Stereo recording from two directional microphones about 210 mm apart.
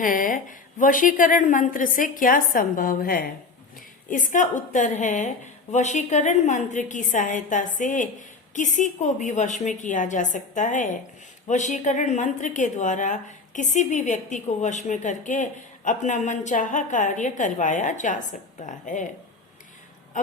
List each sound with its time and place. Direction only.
0.0 s a woman's voice: 40° left (ahead or behind)